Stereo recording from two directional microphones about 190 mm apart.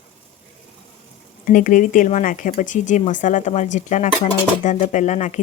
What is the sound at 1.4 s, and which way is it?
Speech, 45° left (ahead or behind).